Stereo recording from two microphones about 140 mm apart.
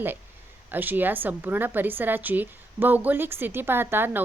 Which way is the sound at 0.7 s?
15° right (ahead or behind).